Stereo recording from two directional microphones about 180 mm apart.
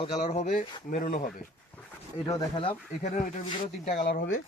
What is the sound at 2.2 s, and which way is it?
Speech, 25° left (ahead or behind).